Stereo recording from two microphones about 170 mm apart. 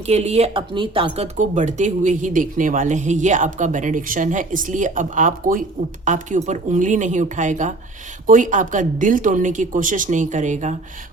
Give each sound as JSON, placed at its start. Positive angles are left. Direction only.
{"t": 0.0, "sound": "speech", "side_deg": -40}